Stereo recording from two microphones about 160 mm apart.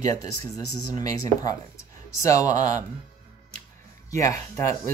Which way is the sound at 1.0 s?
20° left (ahead or behind).